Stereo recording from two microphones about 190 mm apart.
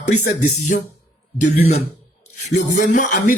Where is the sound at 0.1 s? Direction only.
40° left (ahead or behind).